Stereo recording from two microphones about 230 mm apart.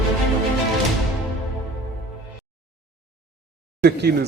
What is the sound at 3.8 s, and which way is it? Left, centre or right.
Speech, right.